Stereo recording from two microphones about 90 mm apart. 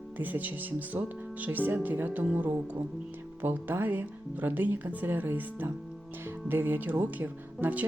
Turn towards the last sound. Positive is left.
turn(degrees=-20)  # may be behind; listen again after turning